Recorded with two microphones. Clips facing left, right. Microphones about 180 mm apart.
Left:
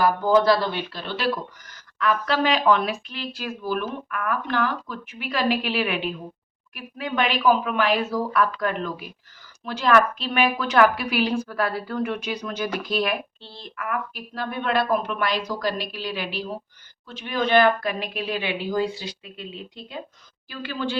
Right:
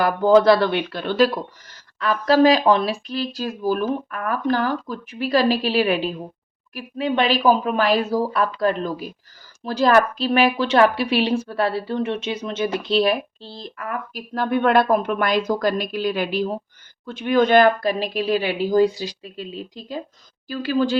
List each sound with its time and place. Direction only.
0.0 s speech: 65° right (ahead or behind)
1.6 s a woman's voice: 30° right (ahead or behind)
14.3 s speech: 55° right (ahead or behind)